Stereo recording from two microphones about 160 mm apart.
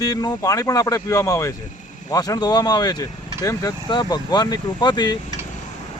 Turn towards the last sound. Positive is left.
turn(degrees=25)  # may be behind; listen again after turning